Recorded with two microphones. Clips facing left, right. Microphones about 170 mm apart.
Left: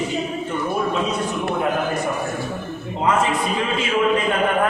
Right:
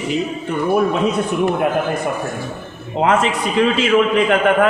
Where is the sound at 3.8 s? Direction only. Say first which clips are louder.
Right 5 dB; 85° right.